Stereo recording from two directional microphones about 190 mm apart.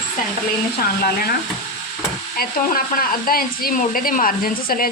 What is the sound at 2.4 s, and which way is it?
Speech, 50° left (ahead or behind).